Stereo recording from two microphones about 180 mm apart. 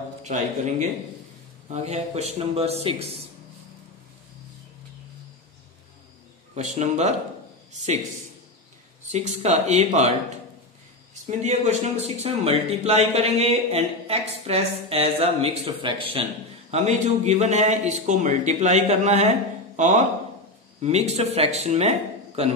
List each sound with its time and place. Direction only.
0.2 s speech: 40° right (ahead or behind)
6.5 s a man's voice: 40° right (ahead or behind)
9.1 s speech: 40° right (ahead or behind)
11.2 s speech: 40° right (ahead or behind)
16.7 s speech: 40° right (ahead or behind)
20.8 s speech: 35° right (ahead or behind)